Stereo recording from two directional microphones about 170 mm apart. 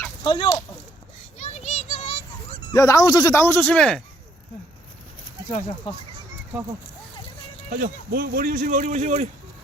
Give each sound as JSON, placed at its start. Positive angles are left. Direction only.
{"t": 0.2, "sound": "speech", "side_deg": 30}
{"t": 1.4, "sound": "a sound", "side_deg": 40}
{"t": 2.7, "sound": "speech", "side_deg": 20}
{"t": 5.9, "sound": "speech", "side_deg": 30}
{"t": 7.7, "sound": "speech", "side_deg": -55}